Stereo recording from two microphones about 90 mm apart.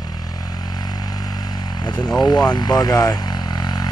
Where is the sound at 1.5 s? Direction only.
55° left (ahead or behind).